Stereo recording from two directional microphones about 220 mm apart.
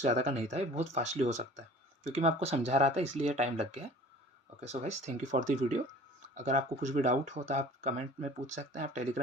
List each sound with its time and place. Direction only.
0.0 s speech: 30° right (ahead or behind)
4.7 s speech: 30° right (ahead or behind)